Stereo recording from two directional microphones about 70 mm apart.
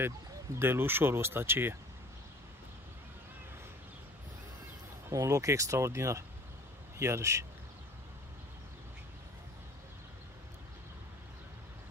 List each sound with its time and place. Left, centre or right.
0.6 s speech: right
5.1 s speech: right